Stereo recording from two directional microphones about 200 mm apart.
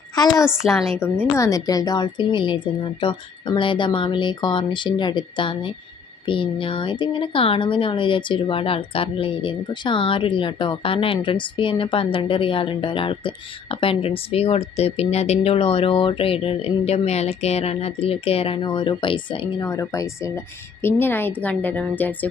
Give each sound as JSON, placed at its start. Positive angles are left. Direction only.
{"t": 0.3, "sound": "a woman's voice", "side_deg": 0}
{"t": 1.2, "sound": "a woman's voice", "side_deg": 15}